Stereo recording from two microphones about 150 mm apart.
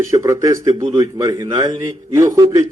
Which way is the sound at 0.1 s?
20° right (ahead or behind).